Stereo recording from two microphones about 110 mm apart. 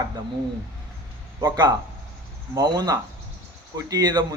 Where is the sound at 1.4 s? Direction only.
40° right (ahead or behind).